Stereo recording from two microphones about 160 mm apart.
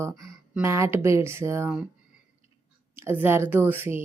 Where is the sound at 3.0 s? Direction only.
15° right (ahead or behind).